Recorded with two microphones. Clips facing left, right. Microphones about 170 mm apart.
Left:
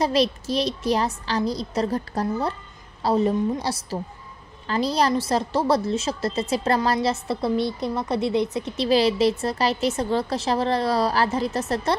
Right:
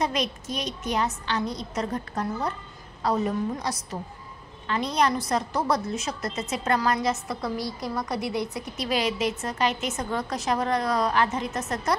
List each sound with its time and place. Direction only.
0.0 s a woman's voice: 30° left (ahead or behind)